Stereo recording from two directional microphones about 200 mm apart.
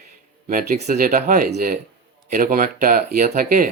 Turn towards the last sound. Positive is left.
turn(degrees=-45)  # may be behind; listen again after turning